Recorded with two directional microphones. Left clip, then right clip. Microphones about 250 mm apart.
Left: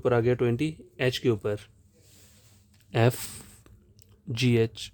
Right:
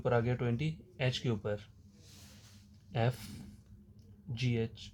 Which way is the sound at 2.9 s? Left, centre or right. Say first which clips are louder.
Left 10 dB; left.